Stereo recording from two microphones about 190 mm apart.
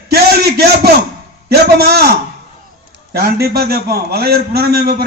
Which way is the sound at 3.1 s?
55° right (ahead or behind).